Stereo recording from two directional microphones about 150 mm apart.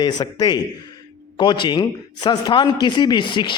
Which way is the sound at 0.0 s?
25° left (ahead or behind).